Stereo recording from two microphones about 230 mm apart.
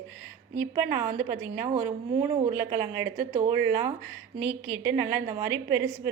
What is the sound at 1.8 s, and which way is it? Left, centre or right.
Speech, right.